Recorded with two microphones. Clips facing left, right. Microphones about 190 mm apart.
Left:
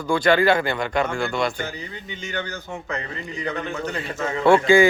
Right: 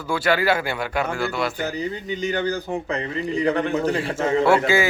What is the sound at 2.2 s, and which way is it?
Speech, 35° right (ahead or behind).